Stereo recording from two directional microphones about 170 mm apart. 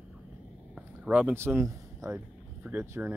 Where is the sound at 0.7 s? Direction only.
5° right (ahead or behind).